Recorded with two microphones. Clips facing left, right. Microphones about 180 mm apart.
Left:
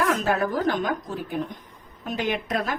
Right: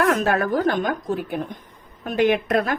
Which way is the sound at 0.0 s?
60° right (ahead or behind).